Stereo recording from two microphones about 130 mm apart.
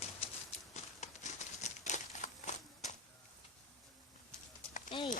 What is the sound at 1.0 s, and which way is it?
Crumpling, 65° left (ahead or behind).